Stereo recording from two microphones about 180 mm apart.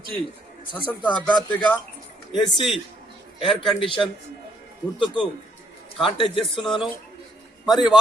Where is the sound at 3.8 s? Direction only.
30° left (ahead or behind).